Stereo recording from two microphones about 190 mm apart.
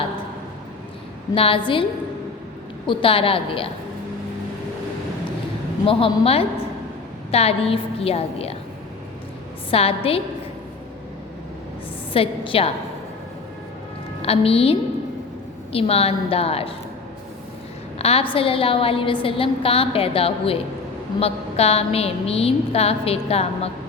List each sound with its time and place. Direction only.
1.4 s a woman's voice: 25° left (ahead or behind)
2.8 s a woman's voice: 25° left (ahead or behind)
5.8 s a woman's voice: 30° left (ahead or behind)
9.6 s a woman's voice: 30° left (ahead or behind)
12.1 s a woman's voice: 30° left (ahead or behind)
14.2 s a woman's voice: 30° left (ahead or behind)
18.0 s a woman's voice: 30° left (ahead or behind)